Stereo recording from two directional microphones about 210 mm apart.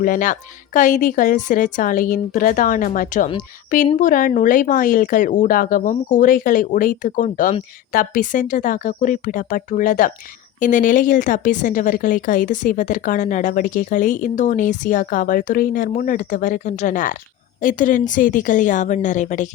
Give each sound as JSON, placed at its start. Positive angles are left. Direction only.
{"t": 0.0, "sound": "a woman's voice", "side_deg": 40}